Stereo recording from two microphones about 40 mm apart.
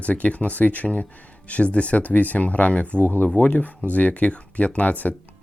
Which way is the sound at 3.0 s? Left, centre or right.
Left.